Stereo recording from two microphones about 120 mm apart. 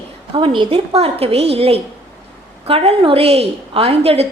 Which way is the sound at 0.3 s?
45° right (ahead or behind).